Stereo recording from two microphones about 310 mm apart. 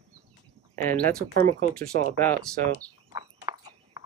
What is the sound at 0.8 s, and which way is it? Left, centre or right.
Speech, centre.